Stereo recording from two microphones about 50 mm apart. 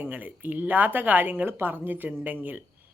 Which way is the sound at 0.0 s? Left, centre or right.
Right.